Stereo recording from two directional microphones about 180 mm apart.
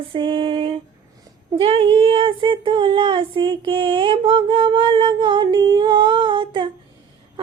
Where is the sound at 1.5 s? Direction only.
30° right (ahead or behind).